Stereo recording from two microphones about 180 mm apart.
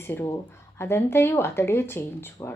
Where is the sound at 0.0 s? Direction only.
10° left (ahead or behind).